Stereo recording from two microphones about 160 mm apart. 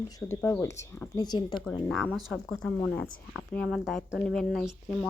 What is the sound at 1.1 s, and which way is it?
Speech, 25° left (ahead or behind).